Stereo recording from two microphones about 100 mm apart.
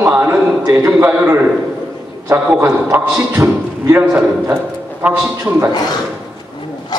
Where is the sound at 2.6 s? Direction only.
20° right (ahead or behind).